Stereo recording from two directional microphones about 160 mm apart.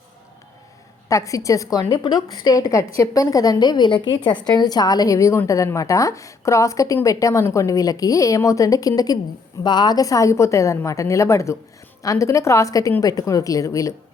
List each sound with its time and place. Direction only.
1.0 s a woman's voice: 20° left (ahead or behind)